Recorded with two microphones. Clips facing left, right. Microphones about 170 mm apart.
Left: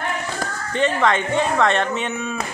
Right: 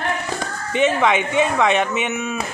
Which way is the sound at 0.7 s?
10° right (ahead or behind).